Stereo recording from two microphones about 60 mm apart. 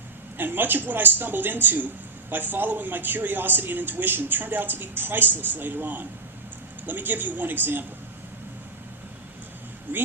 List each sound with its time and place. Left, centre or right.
0.3 s a man's voice: right
9.9 s speech: right